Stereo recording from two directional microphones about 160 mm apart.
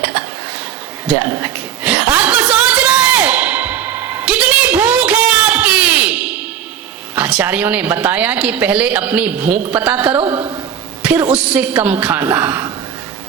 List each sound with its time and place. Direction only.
1.3 s a sound: 10° right (ahead or behind)
7.2 s speech: 10° right (ahead or behind)
10.2 s a woman's voice: 35° right (ahead or behind)
11.0 s speech: 10° right (ahead or behind)